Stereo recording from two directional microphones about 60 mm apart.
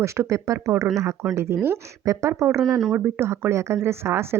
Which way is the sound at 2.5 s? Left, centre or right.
Centre.